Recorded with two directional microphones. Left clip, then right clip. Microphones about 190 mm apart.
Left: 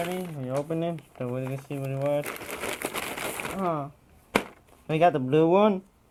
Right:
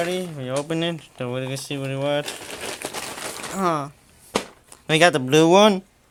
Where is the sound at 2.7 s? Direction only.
15° left (ahead or behind).